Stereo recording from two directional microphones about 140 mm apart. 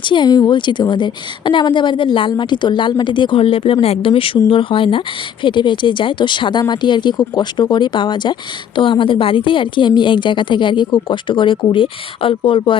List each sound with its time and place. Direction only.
0.0 s speech: 35° left (ahead or behind)